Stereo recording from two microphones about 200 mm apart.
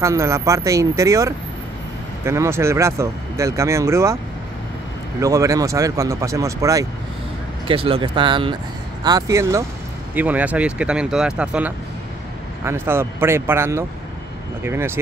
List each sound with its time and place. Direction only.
0.0 s speech: 15° right (ahead or behind)
5.2 s speech: 15° right (ahead or behind)
7.6 s speech: 25° right (ahead or behind); by 15.0 s 10° right (ahead or behind)